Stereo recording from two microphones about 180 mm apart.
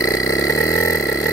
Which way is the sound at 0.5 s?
15° left (ahead or behind).